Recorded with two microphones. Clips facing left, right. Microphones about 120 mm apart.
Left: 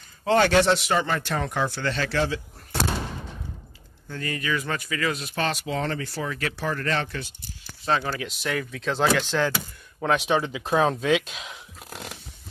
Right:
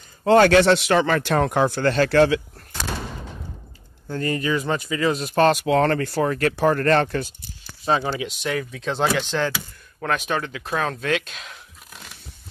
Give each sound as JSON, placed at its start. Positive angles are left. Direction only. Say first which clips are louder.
{"t": 0.2, "sound": "speech", "louder": "right 6 dB", "side_deg": -45}
{"t": 0.5, "sound": "speech", "louder": "right 4 dB", "side_deg": -75}
{"t": 4.1, "sound": "speech", "louder": "right 6 dB", "side_deg": -35}
{"t": 5.2, "sound": "speech", "louder": "right 10 dB", "side_deg": -45}
{"t": 7.8, "sound": "speech", "louder": "right 3 dB", "side_deg": -15}
{"t": 8.3, "sound": "speech", "louder": "right 3 dB", "side_deg": 0}
{"t": 9.9, "sound": "speech", "louder": "left 2 dB", "side_deg": 10}